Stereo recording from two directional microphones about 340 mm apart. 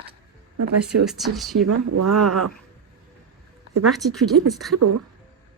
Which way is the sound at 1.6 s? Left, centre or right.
Right.